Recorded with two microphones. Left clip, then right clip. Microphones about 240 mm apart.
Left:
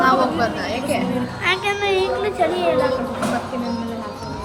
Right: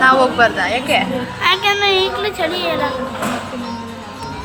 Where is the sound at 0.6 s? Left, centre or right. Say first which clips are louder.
Right 6 dB; centre.